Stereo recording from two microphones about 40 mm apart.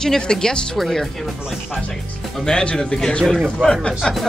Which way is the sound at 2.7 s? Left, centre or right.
Left.